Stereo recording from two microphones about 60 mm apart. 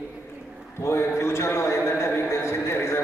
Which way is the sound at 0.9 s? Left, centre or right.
Left.